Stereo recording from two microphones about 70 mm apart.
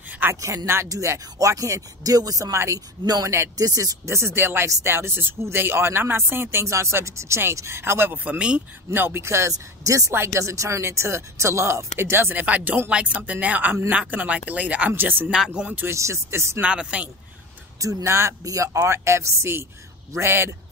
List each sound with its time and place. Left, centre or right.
0.3 s speech: right
2.5 s speech: right
3.5 s speech: right; by 8.6 s centre
8.9 s speech: right
12.4 s speech: right
15.3 s speech: centre
15.9 s speech: right
16.6 s speech: centre
17.7 s speech: right